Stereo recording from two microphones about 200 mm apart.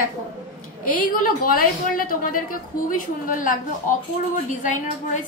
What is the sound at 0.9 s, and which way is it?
A woman's voice, 45° left (ahead or behind).